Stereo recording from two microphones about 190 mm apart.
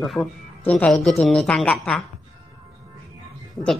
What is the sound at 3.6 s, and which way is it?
Speech, 15° left (ahead or behind).